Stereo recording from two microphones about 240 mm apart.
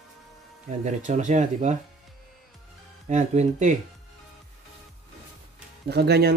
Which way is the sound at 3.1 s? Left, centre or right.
Right.